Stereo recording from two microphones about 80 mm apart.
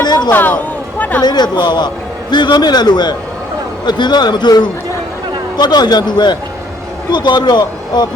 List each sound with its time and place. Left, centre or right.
0.0 s speech: left
0.3 s a woman's voice: left
1.2 s a man's voice: left